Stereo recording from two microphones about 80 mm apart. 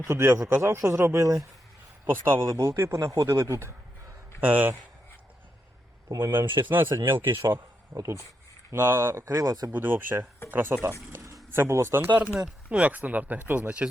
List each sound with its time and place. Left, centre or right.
0.1 s a man's voice: right
2.0 s a man's voice: right
4.4 s speech: right
6.6 s a man's voice: right
9.2 s speech: right
9.7 s speech: right